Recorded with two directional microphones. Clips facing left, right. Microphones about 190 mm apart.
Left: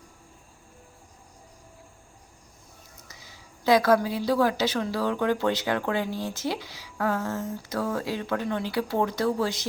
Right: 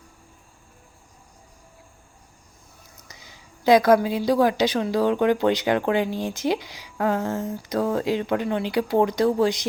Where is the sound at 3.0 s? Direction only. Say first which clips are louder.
Right 1 dB; 20° right (ahead or behind).